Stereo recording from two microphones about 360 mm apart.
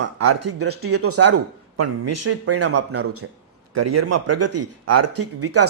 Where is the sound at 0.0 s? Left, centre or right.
Right.